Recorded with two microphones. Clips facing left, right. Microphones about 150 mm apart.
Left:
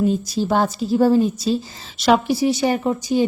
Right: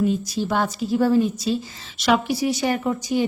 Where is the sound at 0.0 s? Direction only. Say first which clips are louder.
Left 2 dB; 35° left (ahead or behind).